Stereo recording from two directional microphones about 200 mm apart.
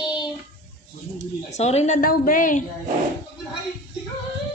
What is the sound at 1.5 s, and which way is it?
Speech, 35° left (ahead or behind).